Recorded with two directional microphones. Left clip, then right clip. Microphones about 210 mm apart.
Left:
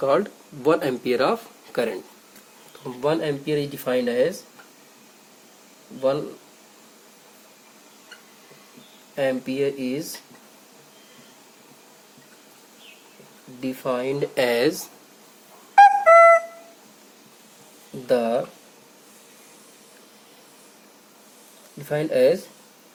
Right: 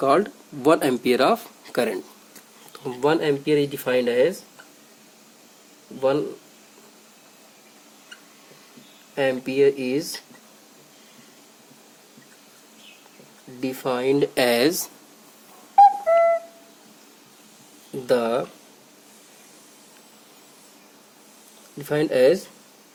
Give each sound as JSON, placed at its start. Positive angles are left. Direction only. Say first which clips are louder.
{"t": 0.0, "sound": "speech", "louder": "right 1 dB", "side_deg": -40}
{"t": 3.0, "sound": "speech", "louder": "right 3 dB", "side_deg": -45}
{"t": 9.1, "sound": "speech", "louder": "right 3 dB", "side_deg": -45}
{"t": 13.6, "sound": "speech", "louder": "right 1 dB", "side_deg": -45}
{"t": 15.7, "sound": "flute", "louder": "left 3 dB", "side_deg": 40}
{"t": 18.0, "sound": "speech", "louder": "even", "side_deg": -45}
{"t": 21.8, "sound": "speech", "louder": "right 1 dB", "side_deg": -45}